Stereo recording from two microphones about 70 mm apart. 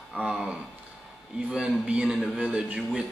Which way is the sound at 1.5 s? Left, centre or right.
Centre.